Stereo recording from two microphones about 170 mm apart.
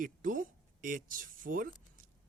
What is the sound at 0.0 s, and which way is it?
Speech, 55° right (ahead or behind).